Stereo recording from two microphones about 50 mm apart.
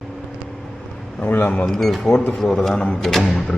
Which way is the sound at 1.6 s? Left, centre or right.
Centre.